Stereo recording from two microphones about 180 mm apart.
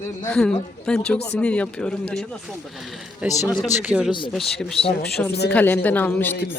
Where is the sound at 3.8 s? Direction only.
5° right (ahead or behind).